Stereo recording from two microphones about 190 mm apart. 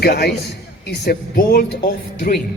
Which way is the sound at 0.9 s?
55° left (ahead or behind).